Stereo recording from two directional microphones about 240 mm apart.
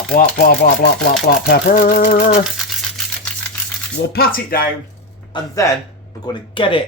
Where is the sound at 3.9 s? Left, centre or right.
Left.